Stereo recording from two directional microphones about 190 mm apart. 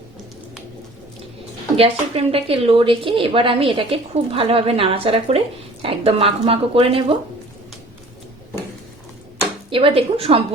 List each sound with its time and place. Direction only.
1.7 s a woman's voice: 30° right (ahead or behind)
9.6 s a woman's voice: 30° right (ahead or behind)